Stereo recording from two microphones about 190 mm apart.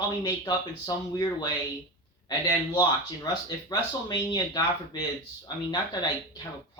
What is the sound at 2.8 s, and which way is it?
Speech, 20° left (ahead or behind).